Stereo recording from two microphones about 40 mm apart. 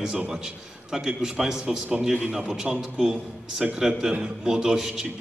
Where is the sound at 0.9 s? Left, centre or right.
Centre.